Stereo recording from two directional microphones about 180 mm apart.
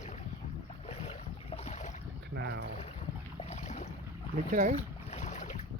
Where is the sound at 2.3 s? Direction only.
70° right (ahead or behind).